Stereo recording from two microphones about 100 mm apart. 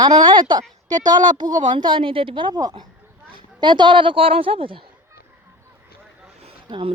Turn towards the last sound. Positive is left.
turn(degrees=-55)  # may be behind; listen again after turning